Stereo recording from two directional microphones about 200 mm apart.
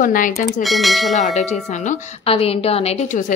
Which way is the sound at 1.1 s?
35° left (ahead or behind).